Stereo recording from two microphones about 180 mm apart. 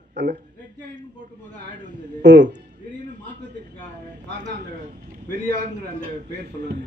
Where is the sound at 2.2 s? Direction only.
80° right.